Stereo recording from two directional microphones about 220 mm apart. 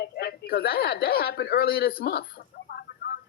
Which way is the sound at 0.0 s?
45° left (ahead or behind).